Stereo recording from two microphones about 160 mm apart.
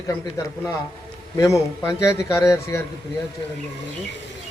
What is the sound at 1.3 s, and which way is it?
A man's voice, 20° left (ahead or behind).